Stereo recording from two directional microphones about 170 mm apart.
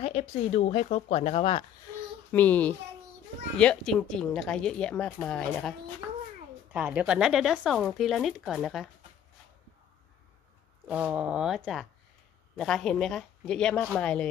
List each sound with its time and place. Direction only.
0.0 s a woman's voice: 40° left (ahead or behind)
2.3 s a child's voice: 10° left (ahead or behind)
6.7 s a woman's voice: 10° right (ahead or behind)
10.9 s a woman's voice: 5° right (ahead or behind)